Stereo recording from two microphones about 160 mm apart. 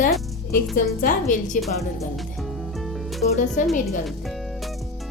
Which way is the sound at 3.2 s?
50° left (ahead or behind).